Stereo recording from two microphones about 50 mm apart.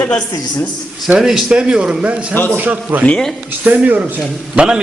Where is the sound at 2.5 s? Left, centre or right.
Right.